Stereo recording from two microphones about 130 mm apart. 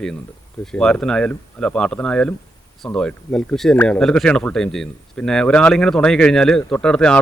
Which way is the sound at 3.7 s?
15° left (ahead or behind).